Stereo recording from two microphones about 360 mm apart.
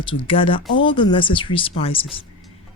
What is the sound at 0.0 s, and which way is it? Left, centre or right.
Speech, centre.